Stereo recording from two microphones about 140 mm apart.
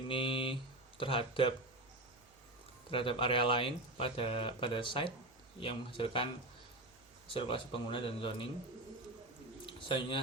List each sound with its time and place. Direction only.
0.1 s speech: 40° left (ahead or behind)
2.9 s speech: 40° left (ahead or behind)
7.3 s speech: 40° left (ahead or behind)
9.6 s a sound: 40° left (ahead or behind)